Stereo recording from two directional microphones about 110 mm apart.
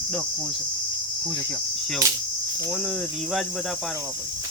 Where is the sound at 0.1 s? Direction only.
5° left (ahead or behind).